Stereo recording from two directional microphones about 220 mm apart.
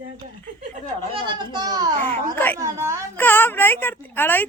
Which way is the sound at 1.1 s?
20° right (ahead or behind).